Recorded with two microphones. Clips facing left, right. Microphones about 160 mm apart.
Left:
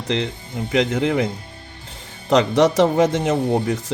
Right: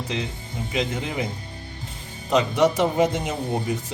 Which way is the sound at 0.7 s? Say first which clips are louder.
Left 8 dB; 90° left.